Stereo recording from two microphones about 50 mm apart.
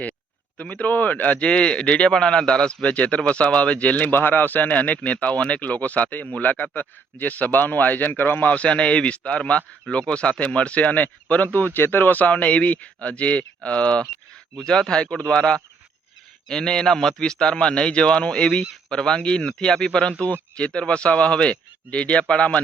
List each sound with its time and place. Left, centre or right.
0.6 s speech: left
1.5 s speech: left
4.1 s a man's voice: left